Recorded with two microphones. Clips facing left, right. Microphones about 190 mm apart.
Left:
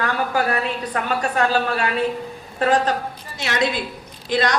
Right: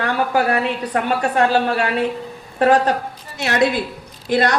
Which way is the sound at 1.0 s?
30° right (ahead or behind).